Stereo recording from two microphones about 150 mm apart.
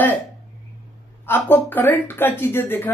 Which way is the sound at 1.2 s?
10° left (ahead or behind).